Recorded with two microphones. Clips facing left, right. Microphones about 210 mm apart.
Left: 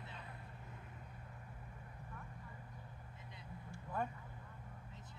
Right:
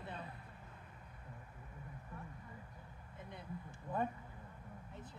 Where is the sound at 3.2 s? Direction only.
55° right (ahead or behind).